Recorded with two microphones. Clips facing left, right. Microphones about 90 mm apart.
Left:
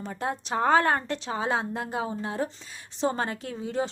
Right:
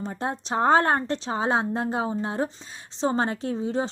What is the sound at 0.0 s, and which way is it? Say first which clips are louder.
A woman's voice: right 2 dB; 25° right (ahead or behind).